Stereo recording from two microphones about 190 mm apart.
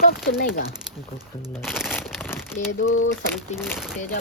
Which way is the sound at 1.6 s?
5° right (ahead or behind).